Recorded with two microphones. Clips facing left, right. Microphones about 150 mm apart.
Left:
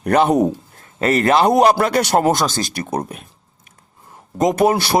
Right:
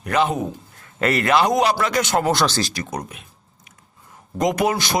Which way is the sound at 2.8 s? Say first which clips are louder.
Left 6 dB; 30° left (ahead or behind).